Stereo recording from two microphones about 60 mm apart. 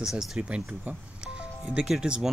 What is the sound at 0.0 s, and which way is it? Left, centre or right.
Speech, centre.